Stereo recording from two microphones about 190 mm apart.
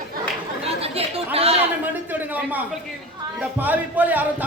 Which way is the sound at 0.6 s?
30° right (ahead or behind).